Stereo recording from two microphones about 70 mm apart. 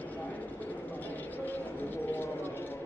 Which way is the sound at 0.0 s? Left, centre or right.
Left.